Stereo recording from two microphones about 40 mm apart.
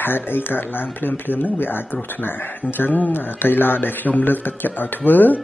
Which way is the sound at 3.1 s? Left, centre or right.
Left.